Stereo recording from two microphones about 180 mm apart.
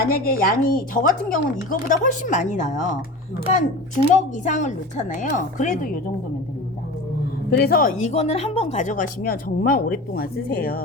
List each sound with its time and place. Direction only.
0.0 s speech: 55° left (ahead or behind)
7.5 s speech: 55° left (ahead or behind)